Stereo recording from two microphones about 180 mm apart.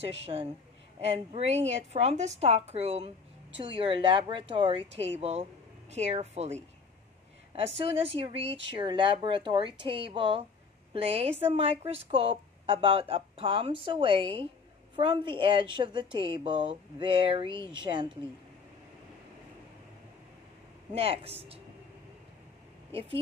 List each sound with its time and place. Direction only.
0.2 s speech: 35° right (ahead or behind)
8.1 s speech: 30° right (ahead or behind)
20.9 s speech: 35° right (ahead or behind)
22.8 s speech: 30° right (ahead or behind)